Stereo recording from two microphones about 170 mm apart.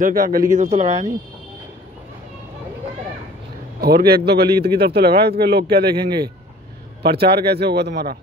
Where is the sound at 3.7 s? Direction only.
65° right (ahead or behind).